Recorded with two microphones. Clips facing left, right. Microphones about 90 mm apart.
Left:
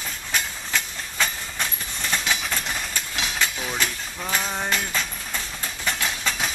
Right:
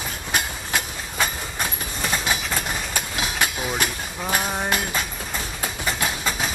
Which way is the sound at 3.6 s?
10° right (ahead or behind).